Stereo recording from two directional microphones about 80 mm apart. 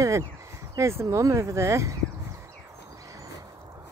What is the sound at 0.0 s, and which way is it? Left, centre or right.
Speech, right.